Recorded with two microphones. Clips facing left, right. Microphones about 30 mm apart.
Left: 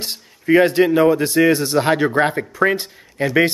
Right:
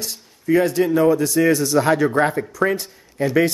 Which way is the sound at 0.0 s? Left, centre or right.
Left.